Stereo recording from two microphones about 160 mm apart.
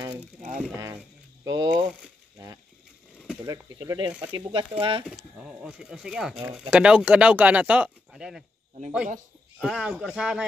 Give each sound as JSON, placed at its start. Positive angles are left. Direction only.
{"t": 1.4, "sound": "mechanisms", "side_deg": -25}
{"t": 3.4, "sound": "speech", "side_deg": -25}
{"t": 5.1, "sound": "speech", "side_deg": -5}
{"t": 9.6, "sound": "speech", "side_deg": -5}